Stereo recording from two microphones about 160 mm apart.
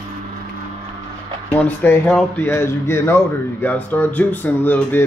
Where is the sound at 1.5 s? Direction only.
10° left (ahead or behind).